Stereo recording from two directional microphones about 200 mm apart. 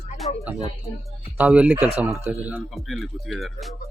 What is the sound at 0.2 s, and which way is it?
Speech, 30° left (ahead or behind).